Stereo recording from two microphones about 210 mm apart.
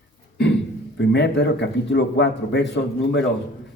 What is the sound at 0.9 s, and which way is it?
Speech, 55° left (ahead or behind).